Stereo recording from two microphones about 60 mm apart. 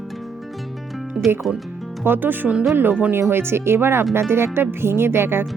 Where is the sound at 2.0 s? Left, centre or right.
Right.